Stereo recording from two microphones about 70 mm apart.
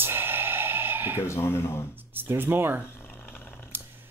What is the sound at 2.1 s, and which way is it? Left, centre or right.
Speech, right.